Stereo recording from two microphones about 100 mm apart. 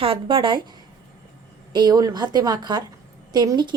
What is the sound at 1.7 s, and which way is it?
A woman's voice, 40° right (ahead or behind).